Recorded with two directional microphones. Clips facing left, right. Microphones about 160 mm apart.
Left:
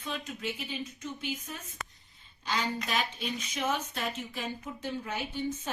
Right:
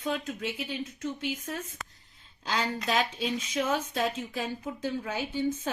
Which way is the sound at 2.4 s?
90° right.